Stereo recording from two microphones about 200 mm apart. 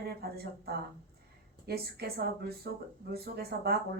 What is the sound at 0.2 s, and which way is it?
Speech, 50° right (ahead or behind).